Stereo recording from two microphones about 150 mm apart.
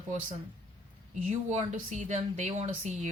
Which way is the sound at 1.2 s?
55° right (ahead or behind).